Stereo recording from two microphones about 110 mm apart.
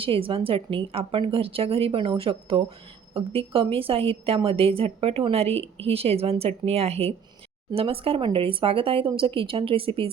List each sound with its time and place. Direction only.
0.0 s a woman's voice: 55° right (ahead or behind)